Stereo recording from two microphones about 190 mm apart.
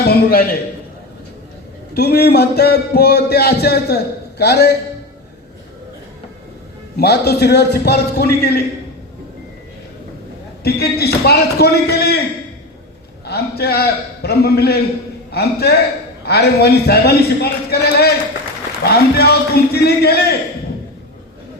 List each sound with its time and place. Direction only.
0.0 s a sound: 55° left (ahead or behind)
1.9 s speech: 60° left (ahead or behind)
6.9 s speech: 55° left (ahead or behind)
10.6 s speech: 55° left (ahead or behind)
13.2 s a man's voice: 55° left (ahead or behind)